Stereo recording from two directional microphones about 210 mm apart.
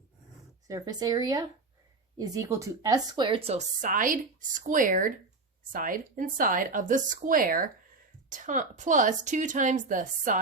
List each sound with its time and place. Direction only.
0.7 s a woman's voice: 20° right (ahead or behind); by 10.3 s 40° right (ahead or behind)